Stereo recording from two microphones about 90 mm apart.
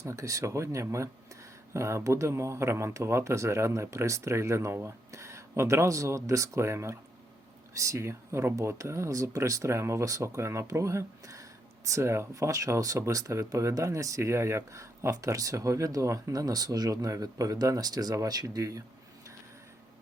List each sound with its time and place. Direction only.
0.0 s speech: 35° right (ahead or behind)